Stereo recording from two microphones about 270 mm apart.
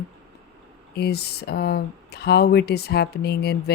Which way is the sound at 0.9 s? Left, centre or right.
Left.